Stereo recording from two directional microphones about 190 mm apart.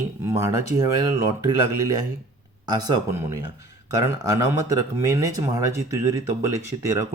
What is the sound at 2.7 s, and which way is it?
Speech, 20° right (ahead or behind).